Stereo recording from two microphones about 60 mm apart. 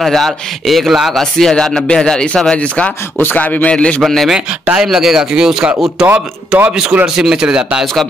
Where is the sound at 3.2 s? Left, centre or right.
Left.